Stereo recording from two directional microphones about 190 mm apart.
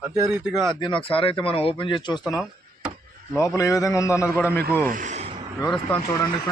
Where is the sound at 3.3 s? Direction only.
15° left (ahead or behind).